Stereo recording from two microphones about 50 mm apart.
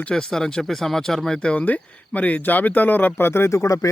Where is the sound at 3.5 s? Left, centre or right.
Left.